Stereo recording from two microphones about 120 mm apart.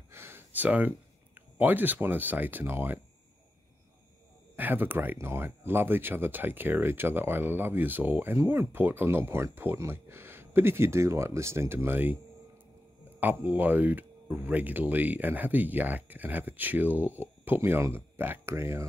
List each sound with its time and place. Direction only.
0.1 s speech: 20° right (ahead or behind)
4.6 s speech: 15° right (ahead or behind)
13.2 s speech: 15° right (ahead or behind)